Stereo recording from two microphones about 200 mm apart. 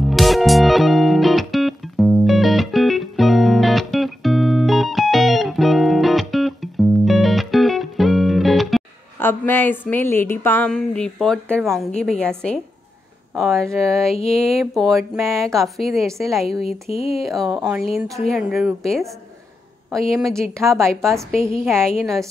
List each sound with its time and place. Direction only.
0.0 s music: centre (ahead or behind)
9.2 s a woman's voice: 10° left (ahead or behind)
21.4 s a woman's voice: 30° left (ahead or behind)